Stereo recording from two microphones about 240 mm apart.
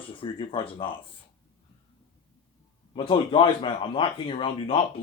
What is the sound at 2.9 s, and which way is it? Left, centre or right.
Speech, left.